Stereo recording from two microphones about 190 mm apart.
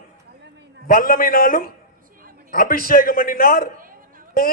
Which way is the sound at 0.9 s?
50° left (ahead or behind).